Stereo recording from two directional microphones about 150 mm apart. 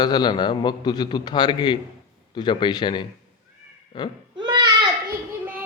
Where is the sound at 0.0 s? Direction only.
30° left (ahead or behind).